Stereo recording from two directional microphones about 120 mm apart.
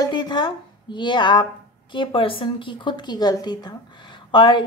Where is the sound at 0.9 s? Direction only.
40° left (ahead or behind).